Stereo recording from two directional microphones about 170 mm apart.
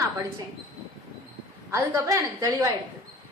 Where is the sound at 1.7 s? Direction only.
20° right (ahead or behind).